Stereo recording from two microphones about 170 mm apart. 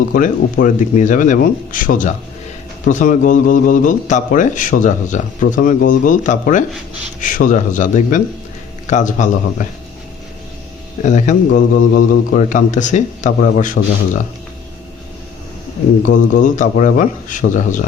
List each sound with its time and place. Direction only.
0.1 s speech: 55° left (ahead or behind)
11.0 s speech: 45° left (ahead or behind)
16.0 s speech: 50° left (ahead or behind)